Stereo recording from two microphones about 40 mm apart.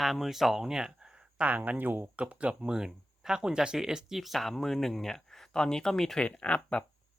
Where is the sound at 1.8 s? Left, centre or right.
Right.